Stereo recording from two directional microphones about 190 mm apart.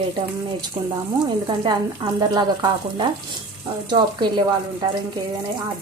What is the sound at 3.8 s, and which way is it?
Speech, 25° right (ahead or behind).